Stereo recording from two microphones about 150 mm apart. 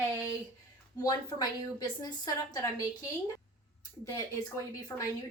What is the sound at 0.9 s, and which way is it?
A woman's voice, 25° left (ahead or behind).